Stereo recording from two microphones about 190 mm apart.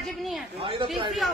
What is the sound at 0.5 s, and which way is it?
Speech, 30° right (ahead or behind).